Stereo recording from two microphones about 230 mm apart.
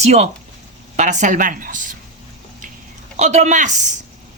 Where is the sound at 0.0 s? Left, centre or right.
Right.